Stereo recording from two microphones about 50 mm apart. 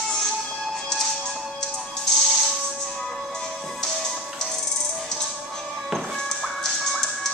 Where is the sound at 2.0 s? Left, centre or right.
Centre.